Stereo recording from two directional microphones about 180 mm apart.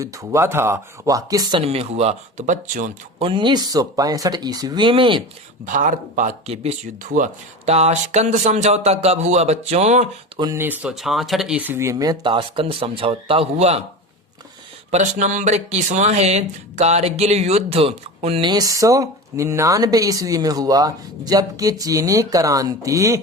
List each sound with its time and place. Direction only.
0.0 s speech: 15° right (ahead or behind); by 2.9 s 45° right (ahead or behind)
3.2 s speech: 30° right (ahead or behind)
5.6 s speech: 45° right (ahead or behind)
10.4 s speech: 15° right (ahead or behind); by 13.8 s 35° right (ahead or behind)
14.8 s speech: 40° right (ahead or behind); by 23.2 s 15° right (ahead or behind)